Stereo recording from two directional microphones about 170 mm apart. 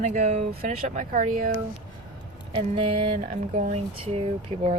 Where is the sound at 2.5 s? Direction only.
35° right (ahead or behind).